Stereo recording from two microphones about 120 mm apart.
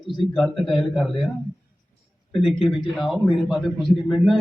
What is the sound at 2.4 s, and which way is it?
A man's voice, centre (ahead or behind).